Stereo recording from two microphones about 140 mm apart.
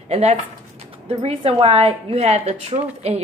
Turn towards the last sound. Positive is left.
turn(degrees=-50)  # may be behind; listen again after turning